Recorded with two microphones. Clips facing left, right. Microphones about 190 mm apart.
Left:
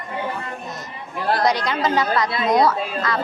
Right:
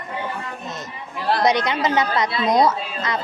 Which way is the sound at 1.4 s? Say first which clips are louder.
Right 2 dB; 20° right (ahead or behind).